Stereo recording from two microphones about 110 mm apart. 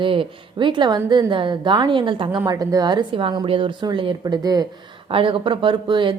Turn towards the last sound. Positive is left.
turn(degrees=-50)  # may be behind; listen again after turning